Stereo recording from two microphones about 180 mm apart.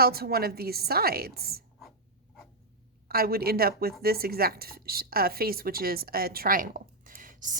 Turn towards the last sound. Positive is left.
turn(degrees=-45)  # may be behind; listen again after turning